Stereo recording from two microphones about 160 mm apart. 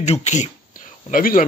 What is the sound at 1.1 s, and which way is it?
Speech, 60° left (ahead or behind).